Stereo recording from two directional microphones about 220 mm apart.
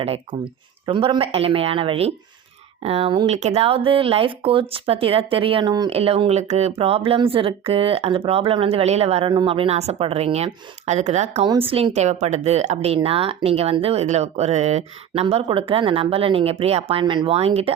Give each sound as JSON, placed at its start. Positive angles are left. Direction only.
{"t": 0.0, "sound": "speech", "side_deg": -25}